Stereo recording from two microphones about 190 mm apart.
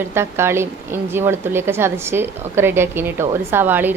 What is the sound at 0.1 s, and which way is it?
Speech, 15° right (ahead or behind).